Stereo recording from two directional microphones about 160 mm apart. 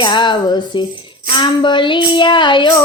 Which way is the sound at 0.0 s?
30° left (ahead or behind).